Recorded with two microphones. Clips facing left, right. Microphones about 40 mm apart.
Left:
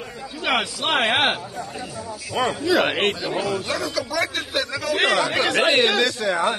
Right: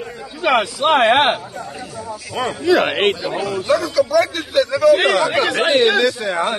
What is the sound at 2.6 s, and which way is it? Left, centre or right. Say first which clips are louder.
Speech: right 6 dB; right.